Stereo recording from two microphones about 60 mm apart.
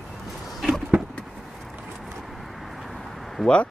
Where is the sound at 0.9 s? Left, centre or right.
Right.